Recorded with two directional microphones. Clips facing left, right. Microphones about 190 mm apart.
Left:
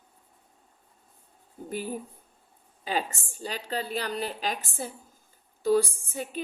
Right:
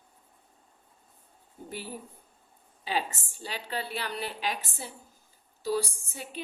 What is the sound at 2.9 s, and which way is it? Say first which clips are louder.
A woman's voice: left 1 dB; 45° left (ahead or behind).